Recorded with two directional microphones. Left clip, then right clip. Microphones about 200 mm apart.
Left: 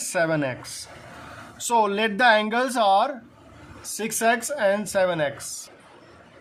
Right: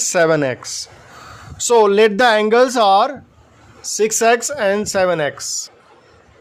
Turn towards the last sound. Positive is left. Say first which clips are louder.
# right 6 dB
turn(degrees=-40)  # may be behind; listen again after turning